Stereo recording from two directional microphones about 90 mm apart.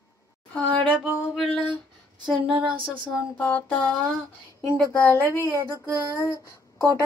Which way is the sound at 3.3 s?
15° left (ahead or behind).